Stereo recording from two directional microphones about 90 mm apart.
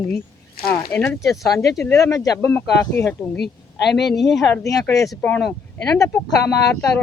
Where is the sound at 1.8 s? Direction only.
35° left (ahead or behind).